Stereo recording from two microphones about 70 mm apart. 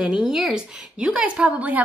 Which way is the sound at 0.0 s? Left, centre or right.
Centre.